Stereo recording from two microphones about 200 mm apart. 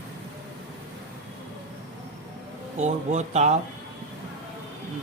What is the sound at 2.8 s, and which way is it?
Speech, 35° right (ahead or behind).